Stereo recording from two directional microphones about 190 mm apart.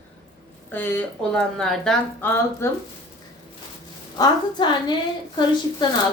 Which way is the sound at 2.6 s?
15° left (ahead or behind).